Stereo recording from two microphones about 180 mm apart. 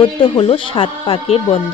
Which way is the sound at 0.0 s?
30° left (ahead or behind).